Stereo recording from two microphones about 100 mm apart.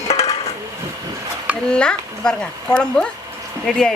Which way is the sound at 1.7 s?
10° left (ahead or behind).